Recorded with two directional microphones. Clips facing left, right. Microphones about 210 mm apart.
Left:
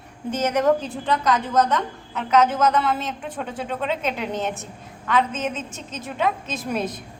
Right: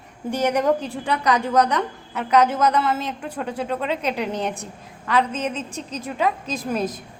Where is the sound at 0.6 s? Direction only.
15° right (ahead or behind).